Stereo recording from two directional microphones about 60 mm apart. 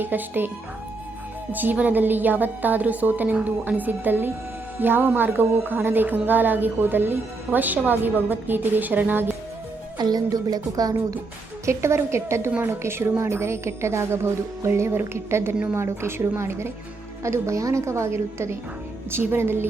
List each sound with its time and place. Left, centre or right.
0.0 s a woman's voice: right
1.5 s a woman's voice: right
10.1 s speech: right
11.6 s a woman's voice: right
19.1 s a woman's voice: right